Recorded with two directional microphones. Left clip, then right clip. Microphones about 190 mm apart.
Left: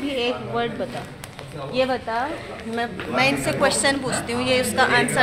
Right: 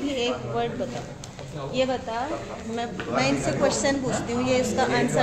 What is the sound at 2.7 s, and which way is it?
Speech, 15° left (ahead or behind).